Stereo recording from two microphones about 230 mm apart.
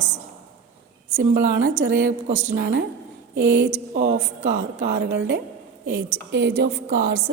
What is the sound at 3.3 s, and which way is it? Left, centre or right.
A woman's voice, right.